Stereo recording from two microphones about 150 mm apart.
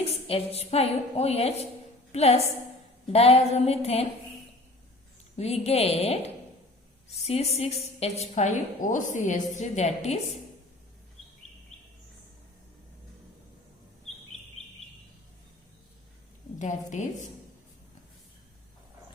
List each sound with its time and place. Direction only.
0.0 s a woman's voice: 40° left (ahead or behind)
5.4 s a woman's voice: 45° left (ahead or behind)
16.6 s a woman's voice: 55° left (ahead or behind)